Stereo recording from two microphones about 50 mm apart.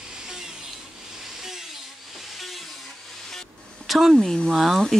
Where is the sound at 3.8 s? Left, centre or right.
Centre.